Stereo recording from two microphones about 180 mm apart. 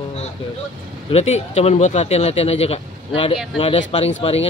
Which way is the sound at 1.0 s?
35° left (ahead or behind).